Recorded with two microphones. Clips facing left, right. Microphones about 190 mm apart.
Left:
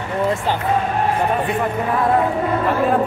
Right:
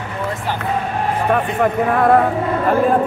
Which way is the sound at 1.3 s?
55° right (ahead or behind).